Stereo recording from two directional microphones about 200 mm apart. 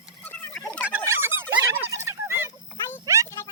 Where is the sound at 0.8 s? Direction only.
10° right (ahead or behind).